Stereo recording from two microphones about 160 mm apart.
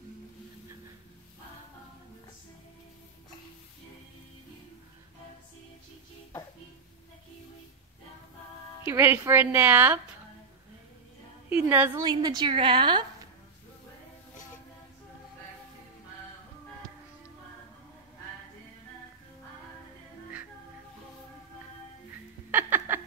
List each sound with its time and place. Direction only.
8.8 s a woman's voice: 15° right (ahead or behind)
11.4 s a woman's voice: 10° right (ahead or behind)
12.0 s a woman's voice: 25° right (ahead or behind)
22.5 s a sound: 10° right (ahead or behind)